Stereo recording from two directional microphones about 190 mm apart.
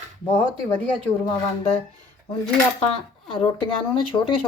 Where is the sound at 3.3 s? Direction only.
25° left (ahead or behind).